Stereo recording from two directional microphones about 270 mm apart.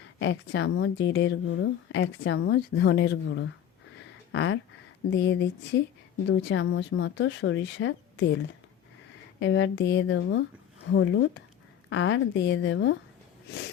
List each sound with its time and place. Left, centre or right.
0.2 s speech: left
9.4 s speech: left